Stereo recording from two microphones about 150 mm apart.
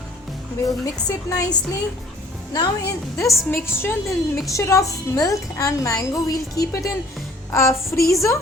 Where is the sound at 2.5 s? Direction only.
25° left (ahead or behind).